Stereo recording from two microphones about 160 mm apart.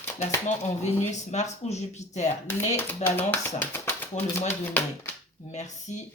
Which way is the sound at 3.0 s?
10° left (ahead or behind).